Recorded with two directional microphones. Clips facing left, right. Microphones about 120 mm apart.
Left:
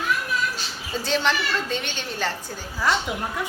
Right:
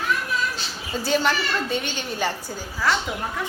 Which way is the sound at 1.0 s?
5° right (ahead or behind).